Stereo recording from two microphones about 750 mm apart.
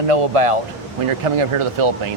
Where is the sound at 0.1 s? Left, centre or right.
Right.